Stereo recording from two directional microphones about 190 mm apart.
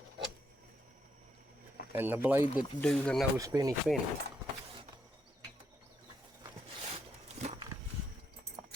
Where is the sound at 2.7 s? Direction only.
5° left (ahead or behind).